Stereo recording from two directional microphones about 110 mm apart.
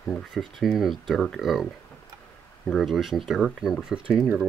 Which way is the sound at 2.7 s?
Centre (ahead or behind).